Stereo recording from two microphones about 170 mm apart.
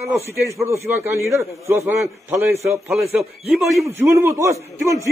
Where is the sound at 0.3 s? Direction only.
15° right (ahead or behind).